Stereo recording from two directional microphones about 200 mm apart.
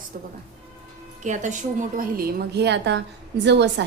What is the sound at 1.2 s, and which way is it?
A woman's voice, 35° right (ahead or behind).